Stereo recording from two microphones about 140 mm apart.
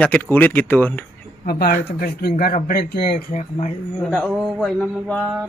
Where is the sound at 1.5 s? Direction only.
90° left.